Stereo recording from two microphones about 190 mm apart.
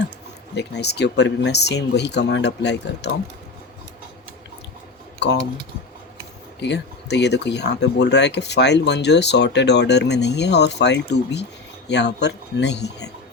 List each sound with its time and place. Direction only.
0.5 s speech: 60° left (ahead or behind)
5.2 s speech: 65° left (ahead or behind)
6.6 s speech: 65° left (ahead or behind)